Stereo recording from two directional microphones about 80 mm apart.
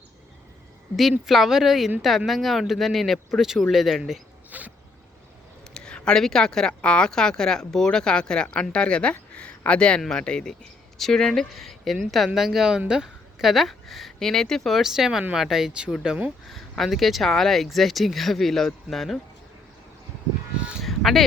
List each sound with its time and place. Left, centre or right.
1.3 s speech: centre
4.5 s a sound: centre
5.7 s speech: centre
16.5 s speech: centre
20.6 s honk: centre
20.8 s a sound: centre